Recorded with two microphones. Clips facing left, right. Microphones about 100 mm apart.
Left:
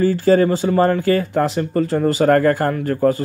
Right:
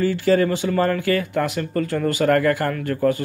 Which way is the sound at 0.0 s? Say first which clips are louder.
Left 4 dB; 35° left (ahead or behind).